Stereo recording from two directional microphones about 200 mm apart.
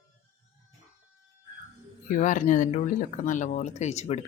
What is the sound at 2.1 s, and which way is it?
Speech, 40° left (ahead or behind).